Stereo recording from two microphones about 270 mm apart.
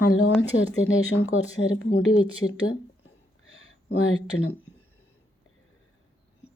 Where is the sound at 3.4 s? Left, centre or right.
Left.